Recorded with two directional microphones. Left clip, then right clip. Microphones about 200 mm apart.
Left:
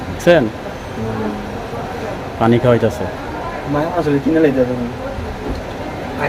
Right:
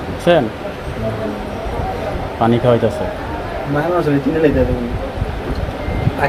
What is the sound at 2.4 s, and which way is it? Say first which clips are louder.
Speech: left 1 dB; 20° left (ahead or behind).